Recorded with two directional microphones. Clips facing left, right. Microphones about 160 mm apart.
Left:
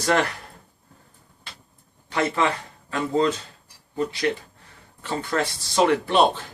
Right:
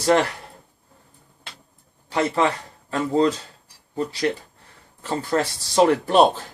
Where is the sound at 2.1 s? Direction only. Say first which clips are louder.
Right 2 dB; 30° right (ahead or behind).